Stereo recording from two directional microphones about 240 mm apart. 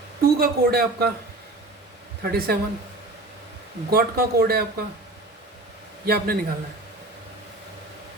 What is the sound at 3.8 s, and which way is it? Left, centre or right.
Speech, right.